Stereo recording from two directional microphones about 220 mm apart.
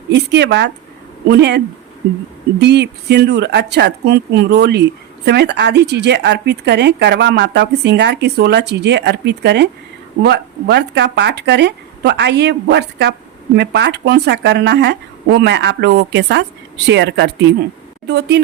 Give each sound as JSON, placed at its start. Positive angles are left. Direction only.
{"t": 0.1, "sound": "speech", "side_deg": -50}